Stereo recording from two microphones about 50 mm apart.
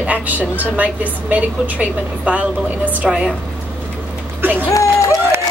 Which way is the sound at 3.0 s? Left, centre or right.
Centre.